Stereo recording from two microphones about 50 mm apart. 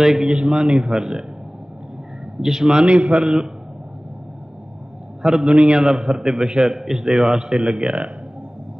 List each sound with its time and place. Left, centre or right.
0.0 s a man's voice: centre
0.7 s speech: centre
2.4 s a man's voice: centre
5.2 s a man's voice: centre
6.8 s a man's voice: centre
7.6 s a man's voice: right